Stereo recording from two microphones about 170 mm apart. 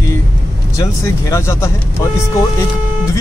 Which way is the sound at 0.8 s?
15° left (ahead or behind).